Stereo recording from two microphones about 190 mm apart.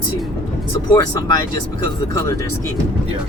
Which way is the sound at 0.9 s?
20° left (ahead or behind).